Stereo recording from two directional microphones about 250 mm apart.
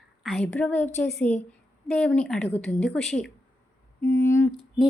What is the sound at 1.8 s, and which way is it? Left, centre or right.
Speech, centre.